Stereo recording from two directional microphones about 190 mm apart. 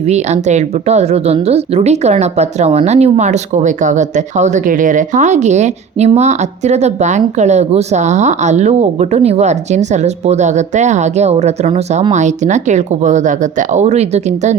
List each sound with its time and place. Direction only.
0.1 s a woman's voice: 35° right (ahead or behind)